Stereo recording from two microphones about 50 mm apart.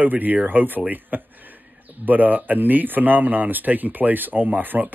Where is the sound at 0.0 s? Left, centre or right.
Right.